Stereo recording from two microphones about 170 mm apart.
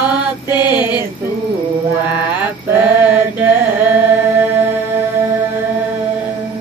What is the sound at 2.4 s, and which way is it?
Chant, 10° right (ahead or behind).